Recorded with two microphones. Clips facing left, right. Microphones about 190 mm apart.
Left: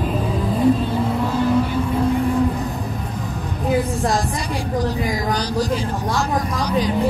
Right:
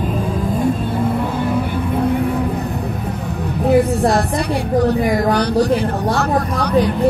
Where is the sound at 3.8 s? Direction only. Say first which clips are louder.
Right 6 dB; 65° right (ahead or behind).